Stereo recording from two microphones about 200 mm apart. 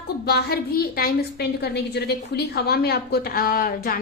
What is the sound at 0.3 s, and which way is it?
A woman's voice, 50° left (ahead or behind).